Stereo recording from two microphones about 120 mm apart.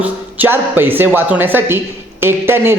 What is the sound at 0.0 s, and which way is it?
A man's voice, 15° right (ahead or behind).